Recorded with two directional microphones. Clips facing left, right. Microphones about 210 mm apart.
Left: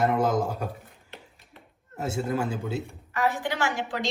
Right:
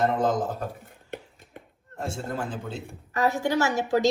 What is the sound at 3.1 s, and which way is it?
Speech, 40° right (ahead or behind).